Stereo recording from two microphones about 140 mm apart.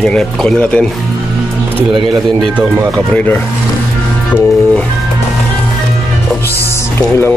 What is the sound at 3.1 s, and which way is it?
Speech, 15° left (ahead or behind).